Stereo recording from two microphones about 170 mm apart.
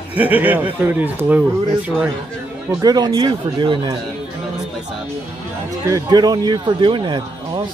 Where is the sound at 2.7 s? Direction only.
20° right (ahead or behind).